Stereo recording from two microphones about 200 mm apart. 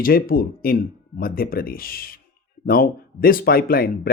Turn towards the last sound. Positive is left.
turn(degrees=45)  # may be behind; listen again after turning